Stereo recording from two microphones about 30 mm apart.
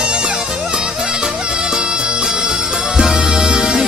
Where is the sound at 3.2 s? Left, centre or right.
Right.